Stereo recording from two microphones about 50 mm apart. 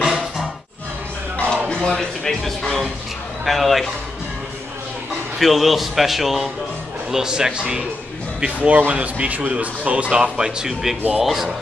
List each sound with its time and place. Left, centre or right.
0.0 s music: centre
1.8 s a man's voice: centre
5.4 s a man's voice: centre
8.6 s a man's voice: right; by 11.5 s centre